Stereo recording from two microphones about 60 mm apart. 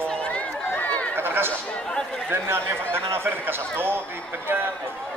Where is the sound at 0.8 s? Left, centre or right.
Left.